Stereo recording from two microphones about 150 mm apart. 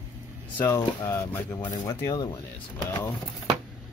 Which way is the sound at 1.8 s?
25° left (ahead or behind).